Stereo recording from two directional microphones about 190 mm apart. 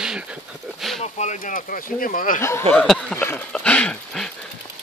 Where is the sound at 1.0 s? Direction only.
35° left (ahead or behind).